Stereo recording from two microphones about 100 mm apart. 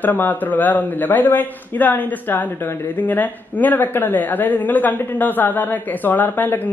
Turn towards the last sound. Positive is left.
turn(degrees=20)  # may be behind; listen again after turning